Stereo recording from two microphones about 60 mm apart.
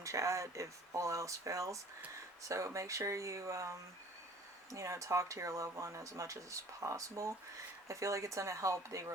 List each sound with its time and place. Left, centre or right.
0.0 s speech: right